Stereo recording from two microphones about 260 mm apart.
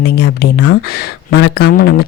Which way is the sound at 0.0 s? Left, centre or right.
Left.